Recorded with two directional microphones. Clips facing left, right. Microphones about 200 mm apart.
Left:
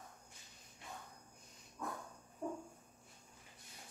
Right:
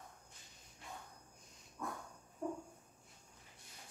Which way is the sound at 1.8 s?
Centre (ahead or behind).